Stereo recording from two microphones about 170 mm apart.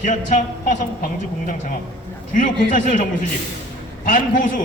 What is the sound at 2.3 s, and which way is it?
Speech, 50° left (ahead or behind).